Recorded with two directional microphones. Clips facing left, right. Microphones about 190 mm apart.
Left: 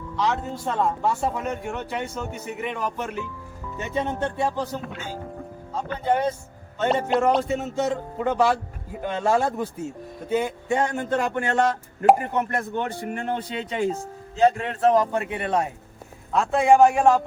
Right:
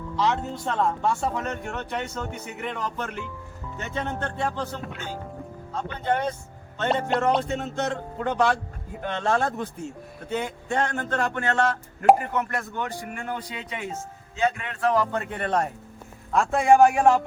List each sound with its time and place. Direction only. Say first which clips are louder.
0.2 s a man's voice: even; centre (ahead or behind)